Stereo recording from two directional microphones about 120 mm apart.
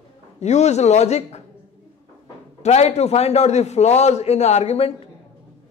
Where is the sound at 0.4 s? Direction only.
70° left (ahead or behind).